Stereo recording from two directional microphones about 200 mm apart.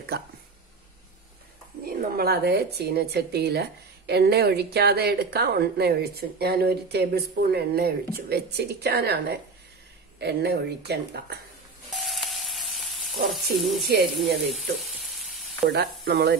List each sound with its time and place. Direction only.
1.9 s a woman's voice: 50° right (ahead or behind)
11.9 s sizzle: centre (ahead or behind)
14.2 s speech: centre (ahead or behind)
15.1 s frying: centre (ahead or behind)
15.7 s a woman's voice: 55° right (ahead or behind)